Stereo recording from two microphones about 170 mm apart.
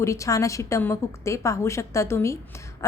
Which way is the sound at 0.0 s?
20° left (ahead or behind).